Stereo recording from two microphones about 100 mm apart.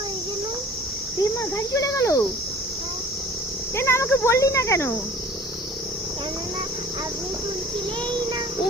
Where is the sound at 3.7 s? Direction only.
25° left (ahead or behind).